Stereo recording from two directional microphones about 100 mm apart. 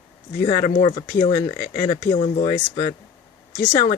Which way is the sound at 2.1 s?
90° left.